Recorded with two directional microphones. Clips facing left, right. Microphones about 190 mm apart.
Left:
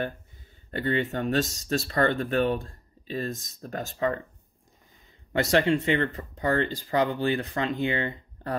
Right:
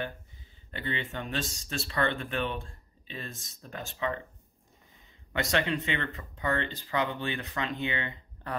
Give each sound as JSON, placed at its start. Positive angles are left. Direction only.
{"t": 0.7, "sound": "speech", "side_deg": 45}
{"t": 5.3, "sound": "speech", "side_deg": 30}